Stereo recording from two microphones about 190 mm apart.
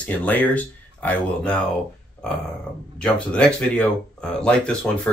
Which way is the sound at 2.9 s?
5° left (ahead or behind).